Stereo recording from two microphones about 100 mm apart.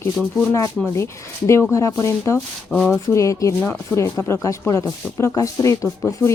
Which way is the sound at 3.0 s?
30° left (ahead or behind).